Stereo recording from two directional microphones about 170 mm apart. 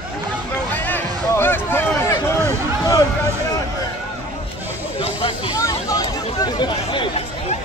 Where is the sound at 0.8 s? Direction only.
10° left (ahead or behind).